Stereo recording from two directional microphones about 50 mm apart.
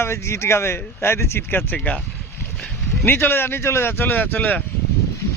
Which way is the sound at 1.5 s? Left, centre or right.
Left.